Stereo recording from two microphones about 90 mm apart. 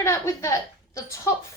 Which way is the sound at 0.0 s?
35° left (ahead or behind).